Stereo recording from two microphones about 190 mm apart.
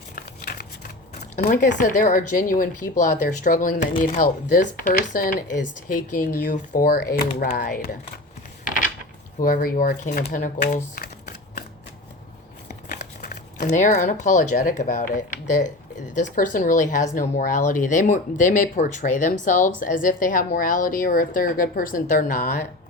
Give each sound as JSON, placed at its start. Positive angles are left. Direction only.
{"t": 0.2, "sound": "a sound", "side_deg": 50}
{"t": 1.5, "sound": "a woman's voice", "side_deg": 45}
{"t": 9.4, "sound": "a woman's voice", "side_deg": 45}
{"t": 10.7, "sound": "typing", "side_deg": 50}
{"t": 12.6, "sound": "crumpling", "side_deg": 55}
{"t": 13.7, "sound": "a woman's voice", "side_deg": 40}